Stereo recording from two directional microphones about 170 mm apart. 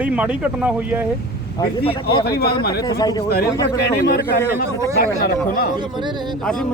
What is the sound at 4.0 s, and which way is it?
A man's voice, 70° left (ahead or behind).